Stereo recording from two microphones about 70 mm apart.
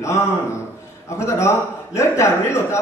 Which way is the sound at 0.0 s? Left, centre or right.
Left.